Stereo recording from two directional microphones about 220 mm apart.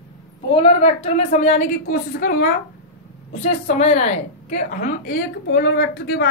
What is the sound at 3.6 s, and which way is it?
A woman's voice, 30° left (ahead or behind).